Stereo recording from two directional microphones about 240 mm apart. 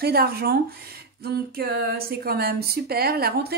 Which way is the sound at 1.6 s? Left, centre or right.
Right.